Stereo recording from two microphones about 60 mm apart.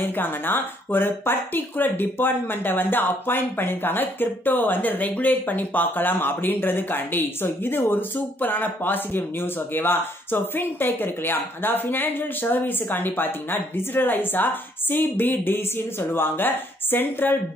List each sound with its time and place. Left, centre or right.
0.0 s speech: left